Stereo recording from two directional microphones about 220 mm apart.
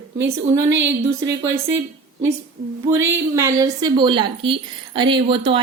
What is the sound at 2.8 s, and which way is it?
A woman's voice, 10° right (ahead or behind).